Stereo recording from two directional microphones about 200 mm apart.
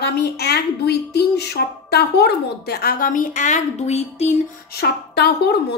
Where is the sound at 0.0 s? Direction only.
55° left (ahead or behind); by 4.4 s 35° left (ahead or behind).